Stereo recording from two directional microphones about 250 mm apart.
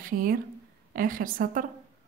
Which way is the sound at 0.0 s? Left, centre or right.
Right.